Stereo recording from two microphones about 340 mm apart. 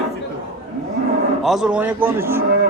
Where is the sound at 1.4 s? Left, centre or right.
Centre.